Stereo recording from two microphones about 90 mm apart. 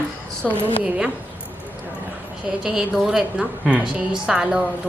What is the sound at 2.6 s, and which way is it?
A woman's voice, 5° right (ahead or behind).